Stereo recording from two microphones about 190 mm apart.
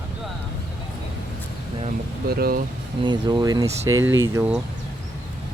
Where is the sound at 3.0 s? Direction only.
25° right (ahead or behind).